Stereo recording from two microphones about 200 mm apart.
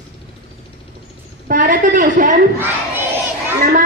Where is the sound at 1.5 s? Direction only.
40° right (ahead or behind).